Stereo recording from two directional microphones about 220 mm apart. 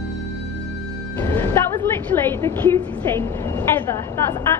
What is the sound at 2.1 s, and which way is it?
A woman's voice, 10° left (ahead or behind).